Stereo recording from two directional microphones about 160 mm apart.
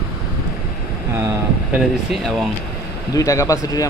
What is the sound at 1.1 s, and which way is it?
Vehicle, 15° right (ahead or behind).